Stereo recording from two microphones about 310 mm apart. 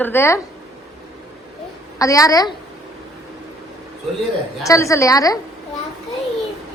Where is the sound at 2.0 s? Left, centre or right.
Centre.